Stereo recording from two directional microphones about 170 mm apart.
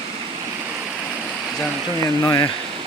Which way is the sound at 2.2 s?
25° left (ahead or behind).